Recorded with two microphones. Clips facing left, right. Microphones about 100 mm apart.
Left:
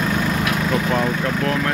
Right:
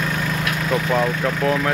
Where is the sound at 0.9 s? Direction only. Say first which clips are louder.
Even; 5° right (ahead or behind).